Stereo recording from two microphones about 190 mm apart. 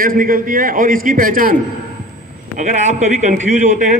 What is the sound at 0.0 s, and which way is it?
A man's voice, 45° right (ahead or behind).